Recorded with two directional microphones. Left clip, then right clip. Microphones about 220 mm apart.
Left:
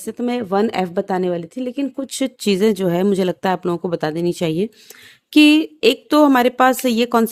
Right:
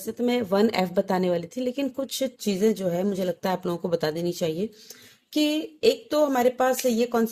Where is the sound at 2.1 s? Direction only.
35° left (ahead or behind).